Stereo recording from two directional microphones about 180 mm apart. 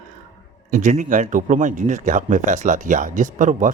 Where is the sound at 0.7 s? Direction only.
45° right (ahead or behind).